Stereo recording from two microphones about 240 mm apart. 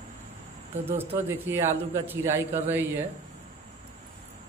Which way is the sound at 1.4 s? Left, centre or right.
Centre.